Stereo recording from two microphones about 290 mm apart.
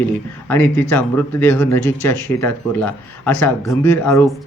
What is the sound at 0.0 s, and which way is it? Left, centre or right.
Speech, centre.